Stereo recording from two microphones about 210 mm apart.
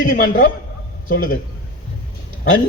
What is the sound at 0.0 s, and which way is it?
A man's voice, 40° left (ahead or behind).